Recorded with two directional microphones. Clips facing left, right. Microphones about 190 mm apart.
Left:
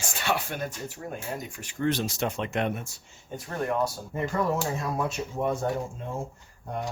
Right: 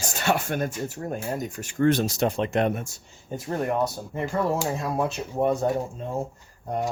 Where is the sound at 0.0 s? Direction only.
40° right (ahead or behind).